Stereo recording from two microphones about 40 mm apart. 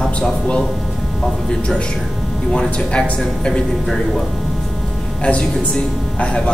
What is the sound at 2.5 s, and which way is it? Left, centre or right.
A man's voice, left.